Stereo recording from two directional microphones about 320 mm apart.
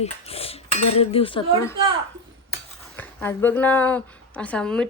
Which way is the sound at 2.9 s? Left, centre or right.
Centre.